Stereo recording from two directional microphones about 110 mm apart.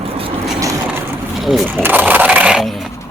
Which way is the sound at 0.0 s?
55° right (ahead or behind).